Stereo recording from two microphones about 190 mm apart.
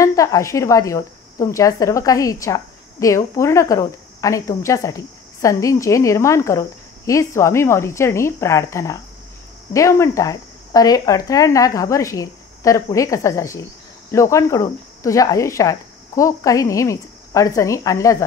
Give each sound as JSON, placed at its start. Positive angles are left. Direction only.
{"t": 0.0, "sound": "speech", "side_deg": 15}